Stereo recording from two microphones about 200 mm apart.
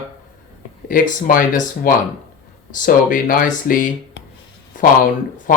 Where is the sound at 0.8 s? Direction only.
45° left (ahead or behind).